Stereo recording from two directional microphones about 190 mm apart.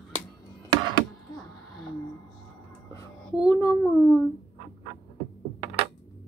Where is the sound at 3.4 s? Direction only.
15° left (ahead or behind).